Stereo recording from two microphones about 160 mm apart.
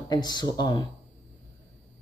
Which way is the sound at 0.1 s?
25° left (ahead or behind).